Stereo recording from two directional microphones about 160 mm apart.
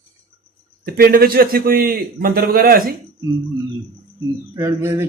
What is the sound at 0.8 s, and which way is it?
A man's voice, 70° right (ahead or behind).